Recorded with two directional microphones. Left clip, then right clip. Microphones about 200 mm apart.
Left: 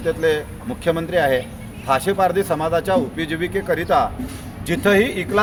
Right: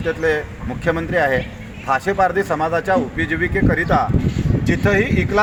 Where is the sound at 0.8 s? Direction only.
25° left (ahead or behind).